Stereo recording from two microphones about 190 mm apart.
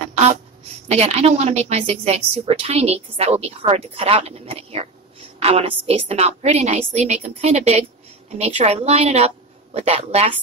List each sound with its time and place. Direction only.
0.8 s a woman's voice: 35° right (ahead or behind)